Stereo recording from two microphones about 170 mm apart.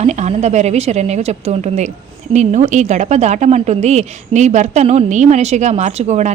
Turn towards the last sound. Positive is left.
turn(degrees=-40)  # may be behind; listen again after turning